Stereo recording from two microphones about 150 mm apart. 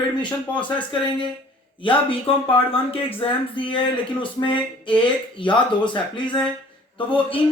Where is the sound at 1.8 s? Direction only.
35° left (ahead or behind).